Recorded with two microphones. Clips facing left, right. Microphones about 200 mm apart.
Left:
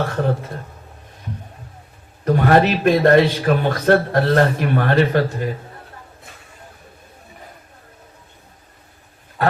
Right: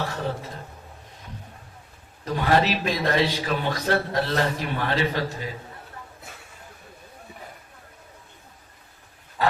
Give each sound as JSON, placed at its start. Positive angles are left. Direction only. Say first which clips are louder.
{"t": 0.0, "sound": "speech", "louder": "left 8 dB", "side_deg": 55}
{"t": 2.2, "sound": "a man's voice", "louder": "left 7 dB", "side_deg": 55}
{"t": 9.4, "sound": "a sound", "louder": "left 4 dB", "side_deg": 55}